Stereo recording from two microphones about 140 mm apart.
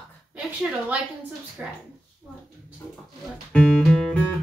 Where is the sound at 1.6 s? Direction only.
10° right (ahead or behind).